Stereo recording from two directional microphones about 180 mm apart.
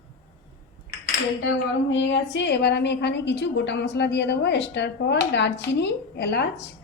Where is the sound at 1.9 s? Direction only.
90° left; by 6.5 s 65° left (ahead or behind).